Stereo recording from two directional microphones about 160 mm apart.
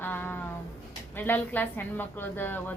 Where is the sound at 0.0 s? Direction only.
10° left (ahead or behind).